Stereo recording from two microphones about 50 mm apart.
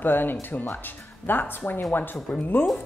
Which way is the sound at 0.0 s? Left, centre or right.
Left.